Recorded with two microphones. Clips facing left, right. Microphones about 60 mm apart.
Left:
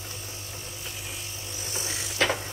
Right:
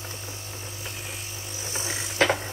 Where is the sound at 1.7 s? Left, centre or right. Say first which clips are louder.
Right 4 dB; right.